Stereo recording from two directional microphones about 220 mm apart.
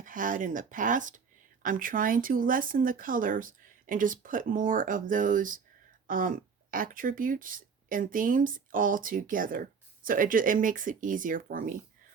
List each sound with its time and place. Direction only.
0.0 s speech: 35° right (ahead or behind)